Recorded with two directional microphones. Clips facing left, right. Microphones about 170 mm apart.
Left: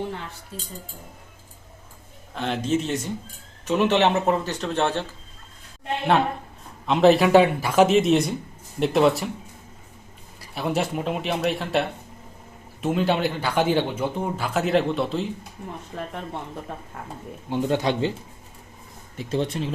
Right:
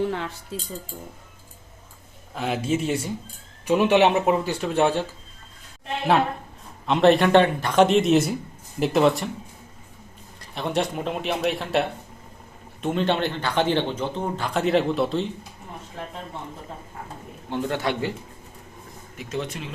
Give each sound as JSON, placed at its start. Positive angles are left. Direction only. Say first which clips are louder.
{"t": 2.3, "sound": "speech", "louder": "left 1 dB", "side_deg": -5}
{"t": 6.8, "sound": "speech", "louder": "left 1 dB", "side_deg": 0}
{"t": 10.5, "sound": "speech", "louder": "even", "side_deg": 5}
{"t": 17.5, "sound": "speech", "louder": "left 3 dB", "side_deg": 20}
{"t": 19.1, "sound": "speech", "louder": "left 5 dB", "side_deg": 30}